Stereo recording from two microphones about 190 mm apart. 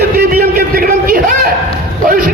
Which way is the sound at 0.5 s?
50° right (ahead or behind).